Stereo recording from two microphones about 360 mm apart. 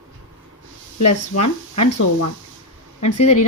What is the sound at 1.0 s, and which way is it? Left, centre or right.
Speech, left.